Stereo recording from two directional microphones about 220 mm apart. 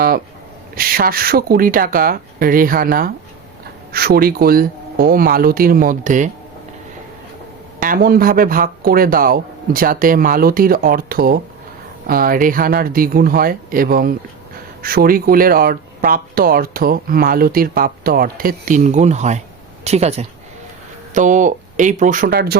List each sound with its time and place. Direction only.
0.8 s speech: 40° right (ahead or behind)
7.8 s speech: 40° right (ahead or behind)